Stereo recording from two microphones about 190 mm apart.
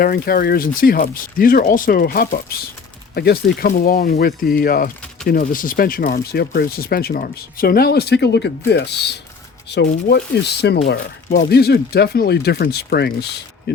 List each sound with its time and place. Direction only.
0.0 s speech: 50° left (ahead or behind)
10.9 s speech: 45° left (ahead or behind)